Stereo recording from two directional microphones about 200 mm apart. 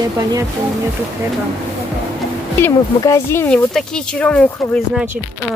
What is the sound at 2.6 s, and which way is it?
Speech, 15° left (ahead or behind).